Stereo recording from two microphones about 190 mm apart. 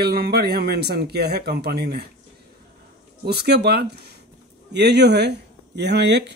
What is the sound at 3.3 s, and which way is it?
Speech, 60° right (ahead or behind).